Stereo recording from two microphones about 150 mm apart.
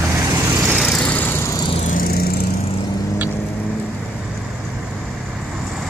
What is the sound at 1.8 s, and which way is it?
Vehicle, 70° left (ahead or behind).